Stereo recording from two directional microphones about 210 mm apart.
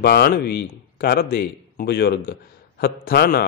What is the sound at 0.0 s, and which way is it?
A man's voice, 50° left (ahead or behind).